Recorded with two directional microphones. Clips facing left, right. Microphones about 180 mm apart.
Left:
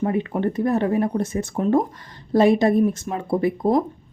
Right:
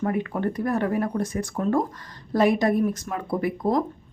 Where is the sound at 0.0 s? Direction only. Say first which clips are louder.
Left 3 dB; 25° left (ahead or behind).